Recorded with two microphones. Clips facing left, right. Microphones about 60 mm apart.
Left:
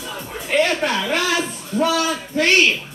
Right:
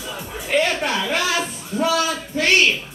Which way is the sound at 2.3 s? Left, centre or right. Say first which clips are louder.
Left 1 dB; centre.